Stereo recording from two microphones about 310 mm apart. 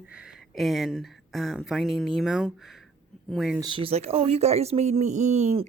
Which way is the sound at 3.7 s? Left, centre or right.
Centre.